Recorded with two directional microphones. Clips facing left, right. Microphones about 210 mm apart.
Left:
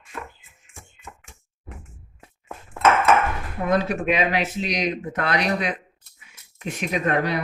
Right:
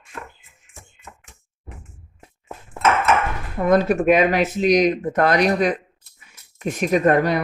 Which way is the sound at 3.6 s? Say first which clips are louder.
Right 6 dB; 45° right (ahead or behind).